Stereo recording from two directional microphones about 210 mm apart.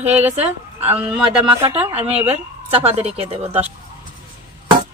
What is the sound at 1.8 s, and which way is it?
A woman's voice, 30° right (ahead or behind).